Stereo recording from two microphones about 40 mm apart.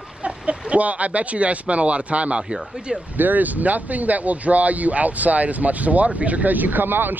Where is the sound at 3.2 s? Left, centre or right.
Right.